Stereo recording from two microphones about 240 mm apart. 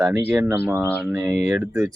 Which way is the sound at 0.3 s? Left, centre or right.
Centre.